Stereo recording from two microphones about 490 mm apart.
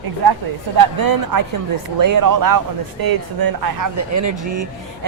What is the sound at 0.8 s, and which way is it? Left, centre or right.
Speech, right.